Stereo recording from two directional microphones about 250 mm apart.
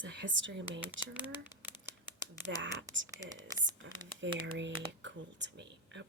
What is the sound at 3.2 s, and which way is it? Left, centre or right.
Speech, centre.